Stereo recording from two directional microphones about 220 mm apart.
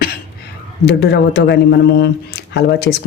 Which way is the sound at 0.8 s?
45° left (ahead or behind).